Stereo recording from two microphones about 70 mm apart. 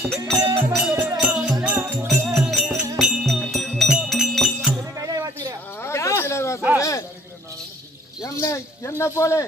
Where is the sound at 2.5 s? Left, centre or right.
Centre.